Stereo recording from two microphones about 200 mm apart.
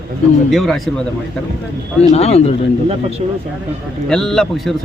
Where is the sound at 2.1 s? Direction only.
30° left (ahead or behind).